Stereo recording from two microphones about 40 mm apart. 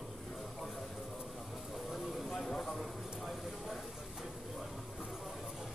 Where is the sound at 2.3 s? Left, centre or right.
Centre.